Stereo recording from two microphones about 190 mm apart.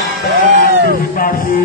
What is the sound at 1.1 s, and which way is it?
Mantra, 50° left (ahead or behind).